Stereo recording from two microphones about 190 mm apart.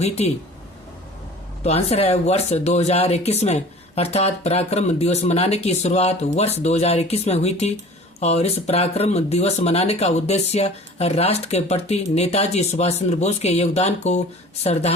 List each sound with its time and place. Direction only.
0.2 s speech: 35° left (ahead or behind)
1.6 s speech: 35° left (ahead or behind)